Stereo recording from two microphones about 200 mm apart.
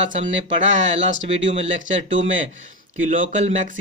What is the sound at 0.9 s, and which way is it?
Speech, 70° right (ahead or behind).